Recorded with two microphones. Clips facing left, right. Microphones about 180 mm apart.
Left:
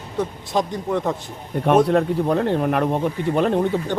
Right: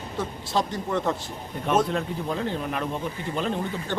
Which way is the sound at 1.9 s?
60° left (ahead or behind).